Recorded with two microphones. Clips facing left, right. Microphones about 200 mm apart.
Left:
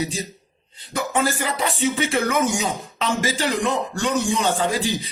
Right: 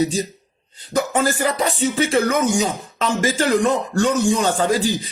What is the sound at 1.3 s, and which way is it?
Speech, 45° right (ahead or behind).